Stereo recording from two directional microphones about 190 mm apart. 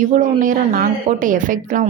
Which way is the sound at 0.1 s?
45° right (ahead or behind).